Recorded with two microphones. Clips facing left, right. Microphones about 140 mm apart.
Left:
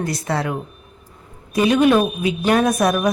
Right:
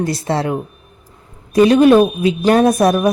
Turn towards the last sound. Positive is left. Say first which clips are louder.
# right 5 dB
turn(degrees=-30)  # may be behind; listen again after turning